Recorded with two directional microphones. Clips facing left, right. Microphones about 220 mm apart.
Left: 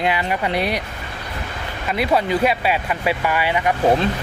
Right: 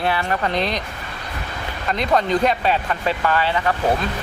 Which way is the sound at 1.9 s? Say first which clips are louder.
Even; 5° left (ahead or behind).